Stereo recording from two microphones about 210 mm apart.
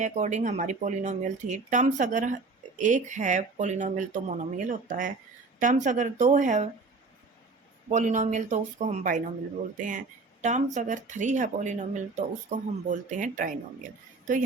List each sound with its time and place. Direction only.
0.0 s speech: 35° right (ahead or behind)
7.9 s speech: 35° right (ahead or behind)